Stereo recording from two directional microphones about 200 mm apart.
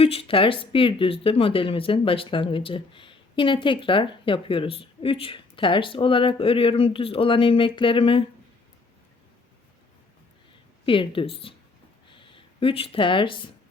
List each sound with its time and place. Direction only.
0.0 s speech: 30° left (ahead or behind)
10.8 s speech: 25° left (ahead or behind)
12.0 s a sound: 25° left (ahead or behind)